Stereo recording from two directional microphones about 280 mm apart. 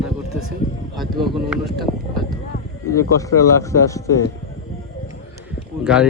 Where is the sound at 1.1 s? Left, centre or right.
Centre.